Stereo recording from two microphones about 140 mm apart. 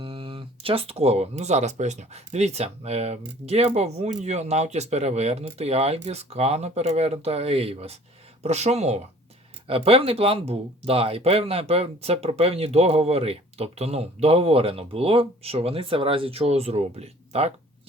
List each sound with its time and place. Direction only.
0.0 s speech: 40° right (ahead or behind)